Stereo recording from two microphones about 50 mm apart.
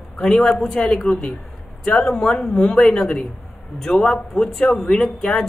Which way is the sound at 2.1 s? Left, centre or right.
Centre.